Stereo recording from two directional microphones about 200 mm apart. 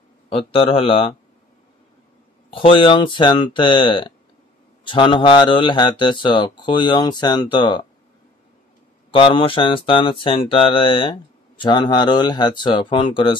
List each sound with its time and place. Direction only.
0.3 s speech: 25° left (ahead or behind)
2.5 s speech: 25° left (ahead or behind)
9.1 s speech: 25° left (ahead or behind)